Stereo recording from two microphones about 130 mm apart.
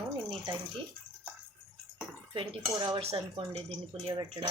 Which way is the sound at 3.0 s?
50° right (ahead or behind).